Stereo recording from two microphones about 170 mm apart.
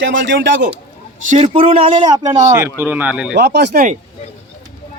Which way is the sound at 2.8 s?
10° right (ahead or behind).